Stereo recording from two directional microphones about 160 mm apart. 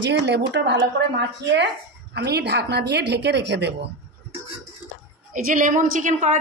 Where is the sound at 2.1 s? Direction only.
90° right.